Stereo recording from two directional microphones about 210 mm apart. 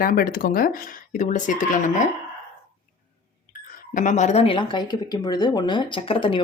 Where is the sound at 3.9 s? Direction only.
35° left (ahead or behind).